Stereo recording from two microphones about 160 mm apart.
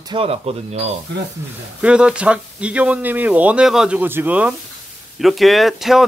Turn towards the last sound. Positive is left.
turn(degrees=0)  # may be behind; listen again after turning